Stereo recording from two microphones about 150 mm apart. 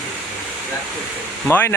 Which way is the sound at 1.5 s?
15° left (ahead or behind).